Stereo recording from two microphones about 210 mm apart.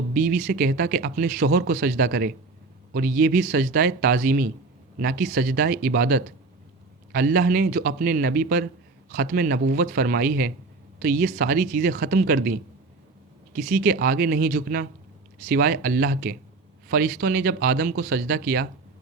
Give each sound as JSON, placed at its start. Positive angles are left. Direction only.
{"t": 0.1, "sound": "speech", "side_deg": -40}